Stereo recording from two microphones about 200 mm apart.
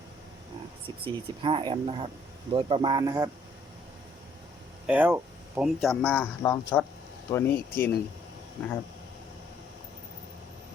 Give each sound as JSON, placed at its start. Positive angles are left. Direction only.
{"t": 1.0, "sound": "speech", "side_deg": -25}
{"t": 4.9, "sound": "speech", "side_deg": -10}